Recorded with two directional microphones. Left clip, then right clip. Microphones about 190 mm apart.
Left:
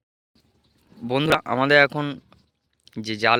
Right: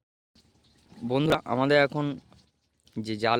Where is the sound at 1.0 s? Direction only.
Centre (ahead or behind).